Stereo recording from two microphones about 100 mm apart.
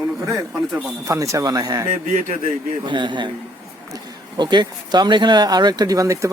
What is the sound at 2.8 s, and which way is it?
Speech, 50° right (ahead or behind).